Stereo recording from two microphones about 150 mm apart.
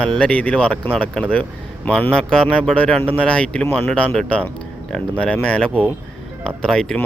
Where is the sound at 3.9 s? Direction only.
5° left (ahead or behind).